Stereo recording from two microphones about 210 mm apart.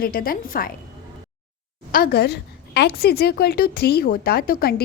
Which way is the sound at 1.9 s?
45° left (ahead or behind).